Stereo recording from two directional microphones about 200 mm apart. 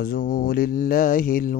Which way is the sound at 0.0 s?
45° left (ahead or behind).